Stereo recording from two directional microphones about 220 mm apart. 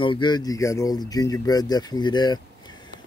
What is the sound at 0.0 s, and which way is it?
Speech, 20° left (ahead or behind).